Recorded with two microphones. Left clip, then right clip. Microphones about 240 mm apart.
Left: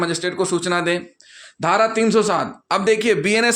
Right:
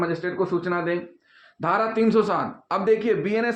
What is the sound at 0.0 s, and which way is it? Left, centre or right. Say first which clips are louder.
Speech: left 4 dB; left.